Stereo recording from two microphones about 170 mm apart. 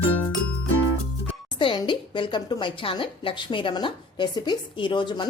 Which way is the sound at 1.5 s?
30° left (ahead or behind).